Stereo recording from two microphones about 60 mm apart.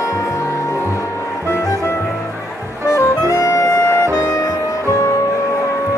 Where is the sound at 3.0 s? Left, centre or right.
Left.